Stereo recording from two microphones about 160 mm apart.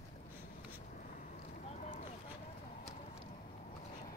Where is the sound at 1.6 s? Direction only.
45° left (ahead or behind).